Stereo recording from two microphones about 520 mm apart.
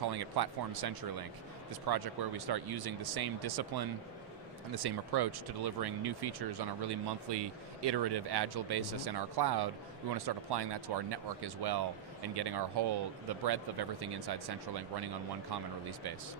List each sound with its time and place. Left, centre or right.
0.0 s speech: right